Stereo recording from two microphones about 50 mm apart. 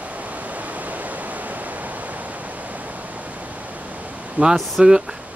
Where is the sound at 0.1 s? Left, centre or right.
Right.